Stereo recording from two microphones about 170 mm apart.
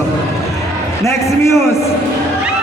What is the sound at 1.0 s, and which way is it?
Speech, 15° left (ahead or behind).